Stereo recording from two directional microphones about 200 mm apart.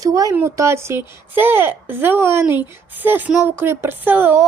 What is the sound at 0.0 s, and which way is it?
Speech, 15° right (ahead or behind).